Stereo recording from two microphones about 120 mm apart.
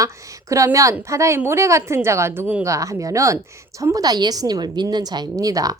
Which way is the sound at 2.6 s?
25° right (ahead or behind).